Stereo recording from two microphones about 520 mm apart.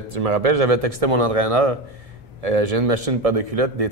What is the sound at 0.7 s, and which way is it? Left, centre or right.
Speech, right.